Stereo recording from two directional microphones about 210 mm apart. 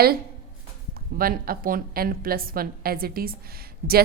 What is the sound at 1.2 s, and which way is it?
A woman's voice, 45° right (ahead or behind).